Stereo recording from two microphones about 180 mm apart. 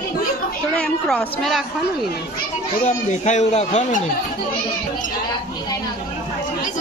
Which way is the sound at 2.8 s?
40° left (ahead or behind).